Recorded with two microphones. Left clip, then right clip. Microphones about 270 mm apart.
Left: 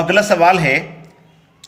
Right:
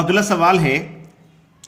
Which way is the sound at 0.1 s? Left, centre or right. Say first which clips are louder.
Left 4 dB; centre.